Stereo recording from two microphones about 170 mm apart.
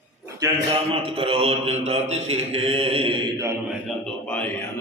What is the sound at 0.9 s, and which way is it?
A man's voice, 35° right (ahead or behind).